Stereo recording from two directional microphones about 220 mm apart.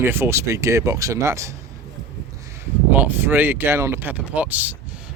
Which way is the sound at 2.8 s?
10° right (ahead or behind).